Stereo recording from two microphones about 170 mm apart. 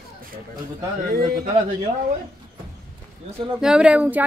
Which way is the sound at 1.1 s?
60° right (ahead or behind).